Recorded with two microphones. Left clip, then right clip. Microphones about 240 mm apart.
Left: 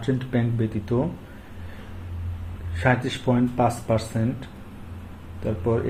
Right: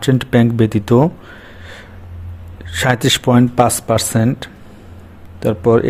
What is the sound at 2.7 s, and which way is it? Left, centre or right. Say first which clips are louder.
A man's voice: right 9 dB; right.